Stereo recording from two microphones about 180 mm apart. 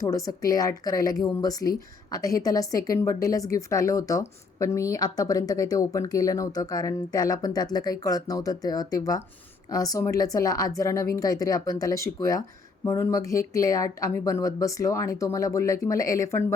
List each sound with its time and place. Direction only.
0.0 s speech: 20° left (ahead or behind)